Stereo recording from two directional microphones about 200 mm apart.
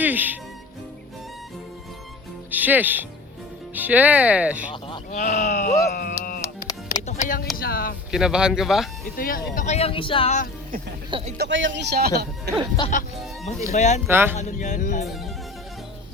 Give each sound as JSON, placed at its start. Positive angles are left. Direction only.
{"t": 0.0, "sound": "speech", "side_deg": -10}
{"t": 2.5, "sound": "speech", "side_deg": -10}
{"t": 5.1, "sound": "speech", "side_deg": 35}
{"t": 6.0, "sound": "music", "side_deg": 45}
{"t": 7.1, "sound": "speech", "side_deg": 40}
{"t": 8.1, "sound": "speech", "side_deg": -5}
{"t": 9.1, "sound": "speech", "side_deg": 45}
{"t": 9.6, "sound": "speech", "side_deg": 35}
{"t": 11.3, "sound": "speech", "side_deg": -65}
{"t": 12.8, "sound": "speech", "side_deg": 20}
{"t": 13.7, "sound": "speech", "side_deg": 35}
{"t": 14.1, "sound": "speech", "side_deg": -10}
{"t": 14.3, "sound": "speech", "side_deg": 35}